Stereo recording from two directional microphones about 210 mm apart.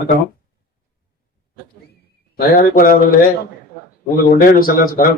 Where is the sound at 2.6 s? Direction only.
45° left (ahead or behind).